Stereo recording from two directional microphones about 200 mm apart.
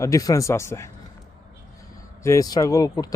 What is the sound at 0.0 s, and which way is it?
Speech, 15° left (ahead or behind).